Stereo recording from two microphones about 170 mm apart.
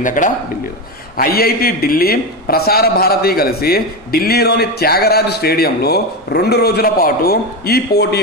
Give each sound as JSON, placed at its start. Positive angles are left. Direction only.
{"t": 0.0, "sound": "a man's voice", "side_deg": 50}
{"t": 1.1, "sound": "a man's voice", "side_deg": 60}